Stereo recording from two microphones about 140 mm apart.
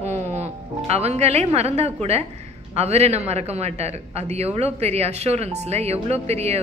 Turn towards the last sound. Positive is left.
turn(degrees=-50)  # may be behind; listen again after turning